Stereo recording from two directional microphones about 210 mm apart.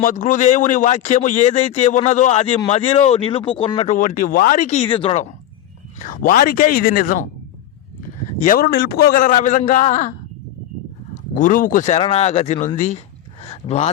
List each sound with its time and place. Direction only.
0.0 s speech: 35° left (ahead or behind)
3.9 s speech: 40° left (ahead or behind)
6.0 s speech: 40° left (ahead or behind)
8.4 s speech: 40° left (ahead or behind)
13.4 s a sound: 30° left (ahead or behind)